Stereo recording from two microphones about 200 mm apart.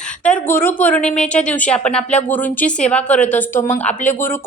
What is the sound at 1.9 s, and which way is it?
Speech, 30° left (ahead or behind).